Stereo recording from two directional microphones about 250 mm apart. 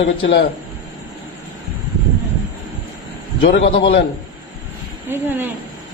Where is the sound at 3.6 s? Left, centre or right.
Left.